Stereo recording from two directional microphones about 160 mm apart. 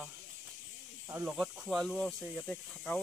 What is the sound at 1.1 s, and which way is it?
Speech, 5° right (ahead or behind).